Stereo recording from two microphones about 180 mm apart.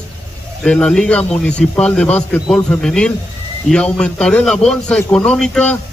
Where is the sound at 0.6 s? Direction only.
5° left (ahead or behind).